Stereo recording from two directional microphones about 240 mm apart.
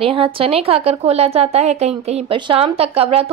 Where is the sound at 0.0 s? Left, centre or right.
Right.